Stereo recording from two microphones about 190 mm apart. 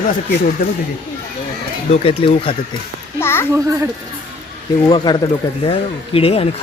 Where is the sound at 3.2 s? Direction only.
15° left (ahead or behind).